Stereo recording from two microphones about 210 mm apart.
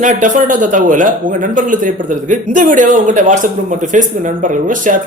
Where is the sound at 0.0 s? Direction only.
40° right (ahead or behind).